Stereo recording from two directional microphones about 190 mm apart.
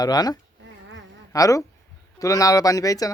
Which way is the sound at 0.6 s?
75° right (ahead or behind).